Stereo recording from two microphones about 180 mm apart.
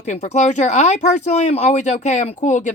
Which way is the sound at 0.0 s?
40° left (ahead or behind).